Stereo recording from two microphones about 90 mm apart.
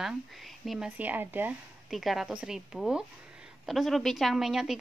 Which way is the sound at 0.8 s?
15° right (ahead or behind).